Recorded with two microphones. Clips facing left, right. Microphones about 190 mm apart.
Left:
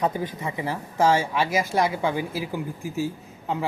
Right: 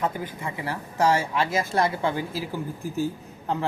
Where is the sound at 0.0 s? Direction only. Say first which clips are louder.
Left 3 dB; 20° left (ahead or behind).